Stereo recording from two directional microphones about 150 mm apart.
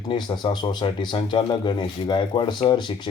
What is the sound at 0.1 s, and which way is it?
Speech, 30° left (ahead or behind).